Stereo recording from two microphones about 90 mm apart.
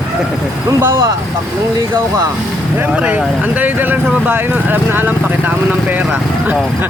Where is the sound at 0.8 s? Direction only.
30° right (ahead or behind).